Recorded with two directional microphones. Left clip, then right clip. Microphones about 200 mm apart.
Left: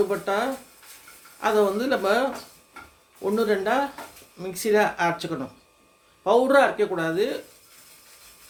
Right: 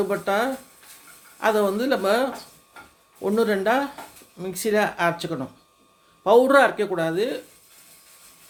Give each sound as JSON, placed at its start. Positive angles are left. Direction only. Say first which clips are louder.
{"t": 0.1, "sound": "speech", "louder": "right 2 dB", "side_deg": -30}